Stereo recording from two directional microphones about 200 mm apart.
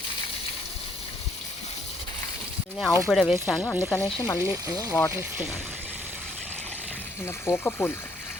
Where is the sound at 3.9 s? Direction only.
15° left (ahead or behind).